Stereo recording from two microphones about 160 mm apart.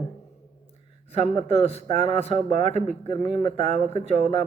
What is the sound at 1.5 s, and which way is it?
Speech, 40° left (ahead or behind).